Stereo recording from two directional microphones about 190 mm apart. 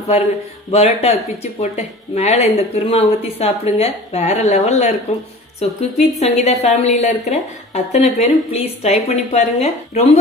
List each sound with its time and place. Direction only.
0.7 s a woman's voice: 35° left (ahead or behind)